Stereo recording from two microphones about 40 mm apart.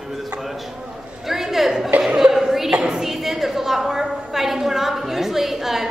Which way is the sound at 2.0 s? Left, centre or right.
Centre.